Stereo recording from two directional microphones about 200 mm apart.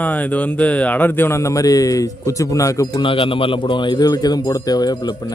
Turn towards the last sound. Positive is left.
turn(degrees=20)  # may be behind; listen again after turning